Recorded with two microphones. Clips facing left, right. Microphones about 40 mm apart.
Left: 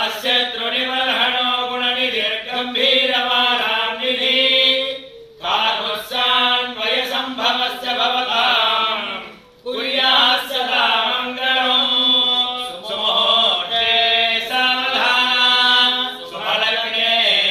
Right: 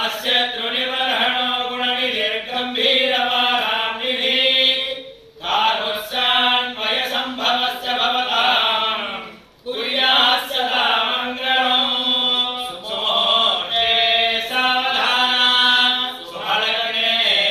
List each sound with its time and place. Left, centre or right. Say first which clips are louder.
0.0 s mantra: left 1 dB; left
0.8 s chant: left 1 dB; left
5.5 s mantra: even; left
6.8 s chant: left 1 dB; left